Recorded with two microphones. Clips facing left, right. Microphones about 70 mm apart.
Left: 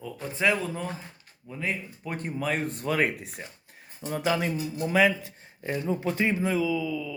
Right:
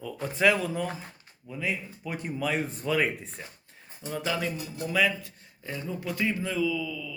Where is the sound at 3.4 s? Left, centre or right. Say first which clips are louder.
Left 2 dB; left.